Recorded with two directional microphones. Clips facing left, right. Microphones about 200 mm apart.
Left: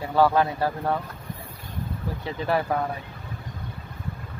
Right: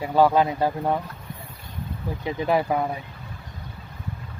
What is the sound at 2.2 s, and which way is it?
Speech, 15° right (ahead or behind).